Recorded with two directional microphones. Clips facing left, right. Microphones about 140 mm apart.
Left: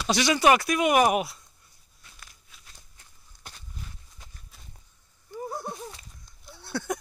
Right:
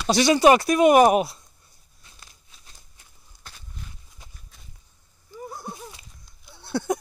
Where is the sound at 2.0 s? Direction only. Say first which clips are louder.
Even; 25° right (ahead or behind).